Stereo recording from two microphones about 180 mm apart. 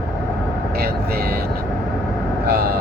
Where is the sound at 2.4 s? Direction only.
60° right (ahead or behind).